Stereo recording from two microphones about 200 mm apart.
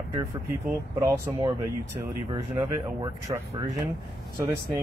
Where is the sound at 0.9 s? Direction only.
15° right (ahead or behind).